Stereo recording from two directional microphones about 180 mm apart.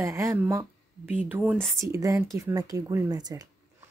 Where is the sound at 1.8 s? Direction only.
15° right (ahead or behind).